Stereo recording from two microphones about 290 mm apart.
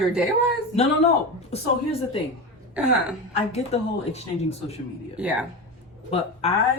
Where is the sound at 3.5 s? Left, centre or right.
Left.